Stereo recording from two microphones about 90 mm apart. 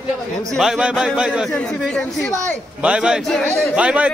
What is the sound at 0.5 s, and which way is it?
Speech, 5° right (ahead or behind).